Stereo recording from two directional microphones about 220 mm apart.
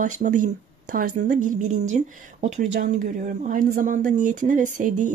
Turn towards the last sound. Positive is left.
turn(degrees=-35)  # may be behind; listen again after turning